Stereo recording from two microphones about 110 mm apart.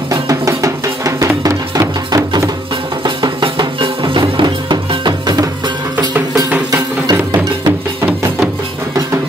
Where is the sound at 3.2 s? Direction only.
45° right (ahead or behind).